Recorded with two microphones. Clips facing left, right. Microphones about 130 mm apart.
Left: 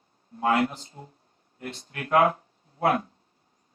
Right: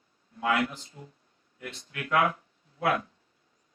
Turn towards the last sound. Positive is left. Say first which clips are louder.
# left 4 dB
turn(degrees=35)  # may be behind; listen again after turning